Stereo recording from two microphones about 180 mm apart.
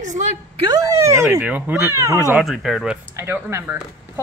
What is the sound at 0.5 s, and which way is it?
Speech, 20° right (ahead or behind).